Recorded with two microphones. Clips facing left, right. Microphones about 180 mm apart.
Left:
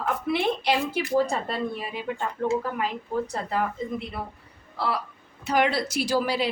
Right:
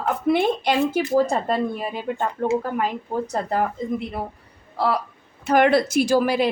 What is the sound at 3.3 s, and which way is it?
Speech, 45° right (ahead or behind).